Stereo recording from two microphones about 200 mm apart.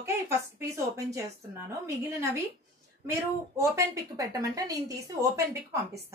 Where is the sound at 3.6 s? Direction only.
15° right (ahead or behind).